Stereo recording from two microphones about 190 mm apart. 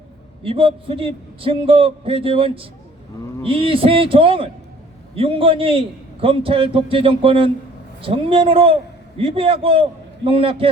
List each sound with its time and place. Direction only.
0.4 s a man's voice: 30° right (ahead or behind)